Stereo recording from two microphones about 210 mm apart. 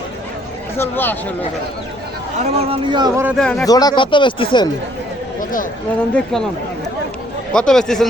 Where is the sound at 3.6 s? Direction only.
20° left (ahead or behind).